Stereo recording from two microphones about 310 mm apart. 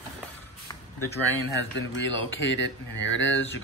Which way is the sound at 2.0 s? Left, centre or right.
Left.